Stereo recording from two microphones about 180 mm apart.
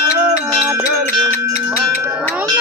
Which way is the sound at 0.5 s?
5° right (ahead or behind).